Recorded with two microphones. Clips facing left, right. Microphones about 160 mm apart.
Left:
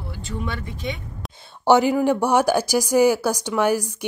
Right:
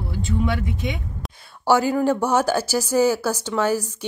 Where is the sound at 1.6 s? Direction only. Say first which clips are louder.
Left 2 dB; 20° left (ahead or behind).